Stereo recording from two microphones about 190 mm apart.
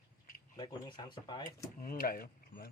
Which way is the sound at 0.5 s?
25° left (ahead or behind).